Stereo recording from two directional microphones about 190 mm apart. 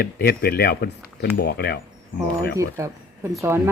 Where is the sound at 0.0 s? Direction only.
55° left (ahead or behind).